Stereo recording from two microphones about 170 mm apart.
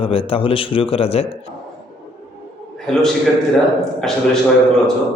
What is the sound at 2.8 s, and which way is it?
Speech, centre (ahead or behind).